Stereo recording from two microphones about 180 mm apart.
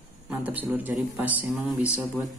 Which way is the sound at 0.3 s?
10° right (ahead or behind).